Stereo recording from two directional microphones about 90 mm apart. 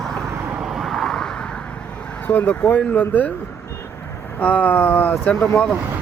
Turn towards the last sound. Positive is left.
turn(degrees=10)  # may be behind; listen again after turning